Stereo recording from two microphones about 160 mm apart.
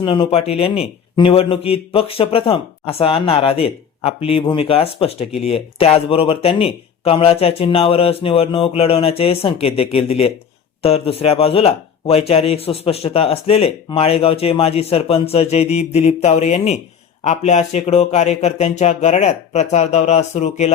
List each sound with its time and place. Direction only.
0.0 s speech: 30° left (ahead or behind)